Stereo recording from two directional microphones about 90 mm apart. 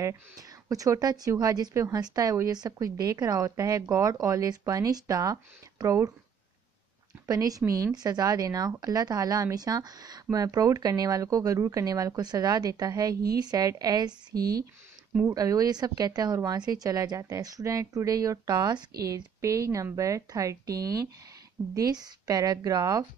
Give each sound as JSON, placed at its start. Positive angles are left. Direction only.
{"t": 0.0, "sound": "a woman's voice", "side_deg": -40}
{"t": 7.2, "sound": "a woman's voice", "side_deg": -45}